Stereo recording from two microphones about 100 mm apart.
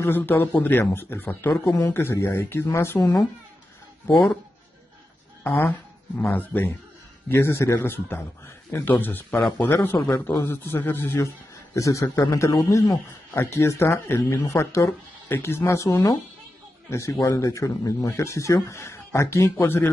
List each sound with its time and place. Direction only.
0.0 s a man's voice: 20° left (ahead or behind)
3.0 s speech: 35° left (ahead or behind)
5.4 s a man's voice: 25° left (ahead or behind)